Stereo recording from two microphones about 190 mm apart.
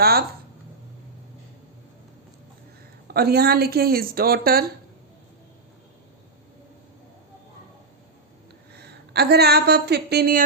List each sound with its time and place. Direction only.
0.0 s speech: 55° right (ahead or behind)
3.1 s a woman's voice: 55° right (ahead or behind)
8.7 s a woman's voice: 60° right (ahead or behind)